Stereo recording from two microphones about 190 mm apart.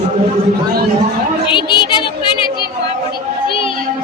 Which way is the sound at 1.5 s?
25° left (ahead or behind).